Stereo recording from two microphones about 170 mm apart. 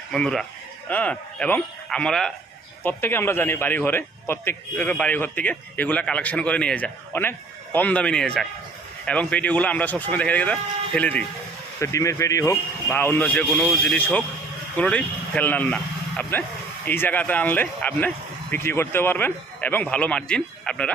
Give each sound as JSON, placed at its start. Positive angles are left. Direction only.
{"t": 0.1, "sound": "a man's voice", "side_deg": 5}
{"t": 11.8, "sound": "a man's voice", "side_deg": 20}